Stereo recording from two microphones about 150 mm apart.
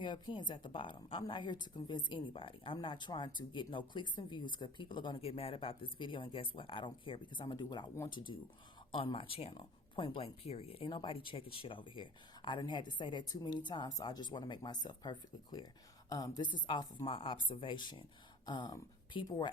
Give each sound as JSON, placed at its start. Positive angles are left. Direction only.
{"t": 0.0, "sound": "a woman's voice", "side_deg": 30}